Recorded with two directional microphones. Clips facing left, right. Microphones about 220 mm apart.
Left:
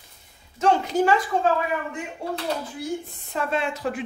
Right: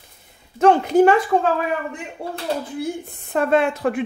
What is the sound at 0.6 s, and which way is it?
A woman's voice, 60° right (ahead or behind).